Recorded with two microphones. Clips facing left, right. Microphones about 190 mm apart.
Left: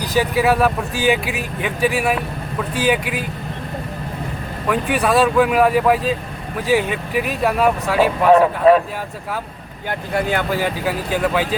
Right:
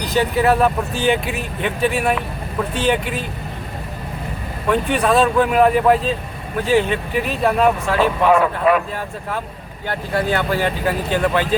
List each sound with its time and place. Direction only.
0.1 s speech: 10° left (ahead or behind)
4.7 s speech: 5° left (ahead or behind)
8.3 s speech: 30° left (ahead or behind)
10.3 s speech: 10° left (ahead or behind)